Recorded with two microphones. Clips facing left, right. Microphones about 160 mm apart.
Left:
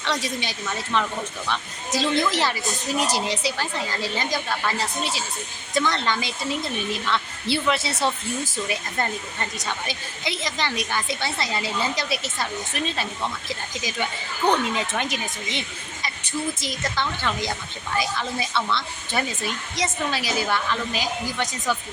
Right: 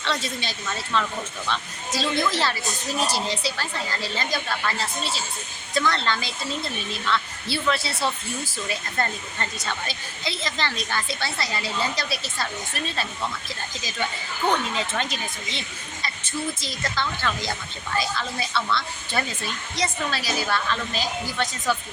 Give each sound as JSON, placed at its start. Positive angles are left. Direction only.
{"t": 0.0, "sound": "speech", "side_deg": 15}
{"t": 14.5, "sound": "speech", "side_deg": 15}